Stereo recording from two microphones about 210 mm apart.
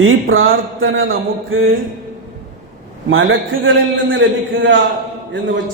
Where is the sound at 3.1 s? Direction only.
70° right (ahead or behind).